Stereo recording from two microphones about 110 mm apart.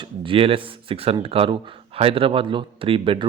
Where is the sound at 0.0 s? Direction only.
55° right (ahead or behind).